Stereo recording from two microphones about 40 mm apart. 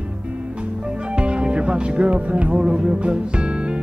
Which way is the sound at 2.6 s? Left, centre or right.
Right.